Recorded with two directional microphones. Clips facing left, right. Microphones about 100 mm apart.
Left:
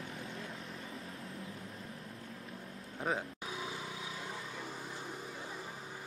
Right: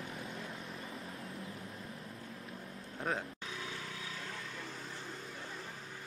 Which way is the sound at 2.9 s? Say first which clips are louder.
Left 1 dB; 5° left (ahead or behind).